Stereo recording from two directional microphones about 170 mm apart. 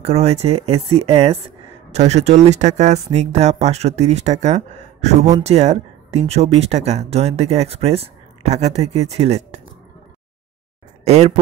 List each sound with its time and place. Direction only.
0.0 s speech: 40° right (ahead or behind)
11.1 s speech: 40° right (ahead or behind)